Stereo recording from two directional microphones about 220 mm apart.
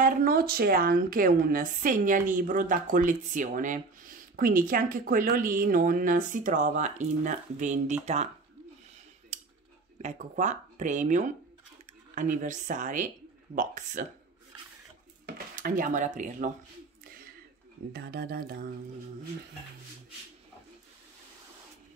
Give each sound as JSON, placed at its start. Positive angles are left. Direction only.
{"t": 0.0, "sound": "speech", "side_deg": -40}
{"t": 9.3, "sound": "a sound", "side_deg": -30}
{"t": 10.0, "sound": "speech", "side_deg": -35}
{"t": 15.2, "sound": "speech", "side_deg": -40}
{"t": 17.9, "sound": "speech", "side_deg": -45}